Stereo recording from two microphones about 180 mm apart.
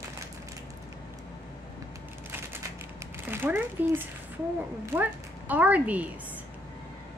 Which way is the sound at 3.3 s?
10° right (ahead or behind).